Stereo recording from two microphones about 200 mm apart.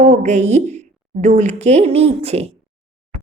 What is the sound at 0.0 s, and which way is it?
A woman's voice, 35° right (ahead or behind).